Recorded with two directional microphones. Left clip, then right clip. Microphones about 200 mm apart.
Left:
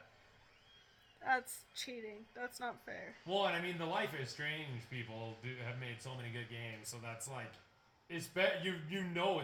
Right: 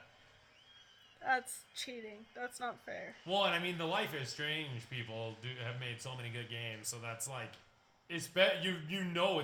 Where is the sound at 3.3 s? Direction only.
45° right (ahead or behind).